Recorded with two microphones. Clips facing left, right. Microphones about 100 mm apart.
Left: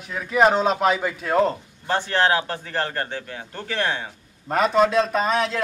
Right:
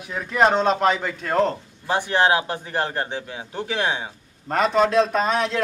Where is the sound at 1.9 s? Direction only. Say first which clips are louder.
Right 1 dB; 15° right (ahead or behind).